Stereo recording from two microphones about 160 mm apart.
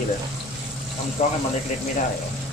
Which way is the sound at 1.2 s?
50° left (ahead or behind).